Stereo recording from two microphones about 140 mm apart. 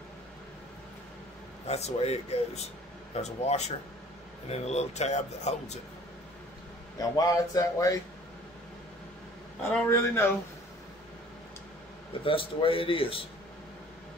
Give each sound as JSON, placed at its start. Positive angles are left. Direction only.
{"t": 1.7, "sound": "speech", "side_deg": 50}
{"t": 7.0, "sound": "speech", "side_deg": 25}
{"t": 9.8, "sound": "speech", "side_deg": 20}
{"t": 12.1, "sound": "speech", "side_deg": 40}